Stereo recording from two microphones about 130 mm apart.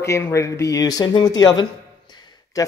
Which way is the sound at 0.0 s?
20° left (ahead or behind).